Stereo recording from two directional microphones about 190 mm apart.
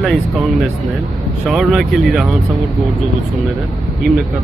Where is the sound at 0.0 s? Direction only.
Centre (ahead or behind).